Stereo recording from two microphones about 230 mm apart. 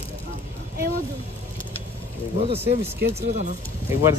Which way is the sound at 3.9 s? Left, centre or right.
Centre.